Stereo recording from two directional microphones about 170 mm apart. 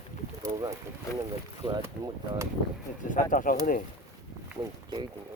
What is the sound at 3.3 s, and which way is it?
Speech, 55° left (ahead or behind).